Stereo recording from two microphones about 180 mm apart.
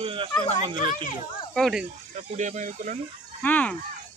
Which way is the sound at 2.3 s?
40° right (ahead or behind).